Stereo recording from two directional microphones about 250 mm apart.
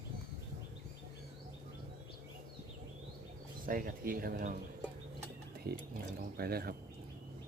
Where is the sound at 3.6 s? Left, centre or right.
Right.